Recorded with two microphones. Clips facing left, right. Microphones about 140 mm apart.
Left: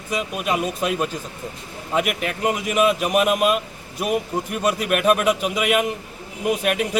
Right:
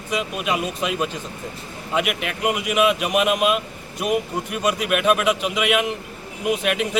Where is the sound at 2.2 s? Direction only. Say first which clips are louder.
Even; 5° right (ahead or behind).